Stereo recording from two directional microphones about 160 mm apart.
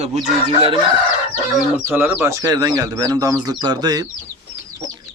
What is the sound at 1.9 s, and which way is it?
Speech, 15° right (ahead or behind).